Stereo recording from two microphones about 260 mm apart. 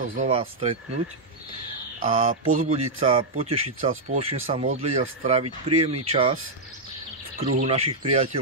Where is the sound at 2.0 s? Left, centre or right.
Right.